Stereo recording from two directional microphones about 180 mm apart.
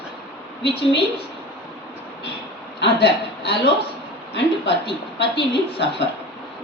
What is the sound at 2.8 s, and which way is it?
Speech, 70° left (ahead or behind).